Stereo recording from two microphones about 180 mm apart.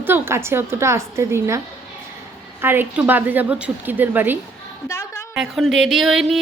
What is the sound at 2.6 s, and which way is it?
A woman's voice, 10° right (ahead or behind).